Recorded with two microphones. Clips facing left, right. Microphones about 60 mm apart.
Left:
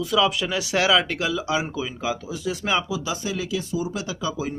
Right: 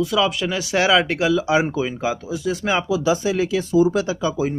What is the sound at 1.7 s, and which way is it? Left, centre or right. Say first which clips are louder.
Speech: right 5 dB; right.